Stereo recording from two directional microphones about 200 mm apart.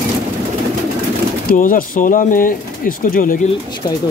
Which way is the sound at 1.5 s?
40° left (ahead or behind).